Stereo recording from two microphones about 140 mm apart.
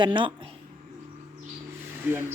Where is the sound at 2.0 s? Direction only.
15° right (ahead or behind).